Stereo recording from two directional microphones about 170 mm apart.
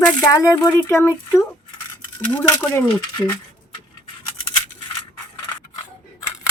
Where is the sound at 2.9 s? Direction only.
25° left (ahead or behind).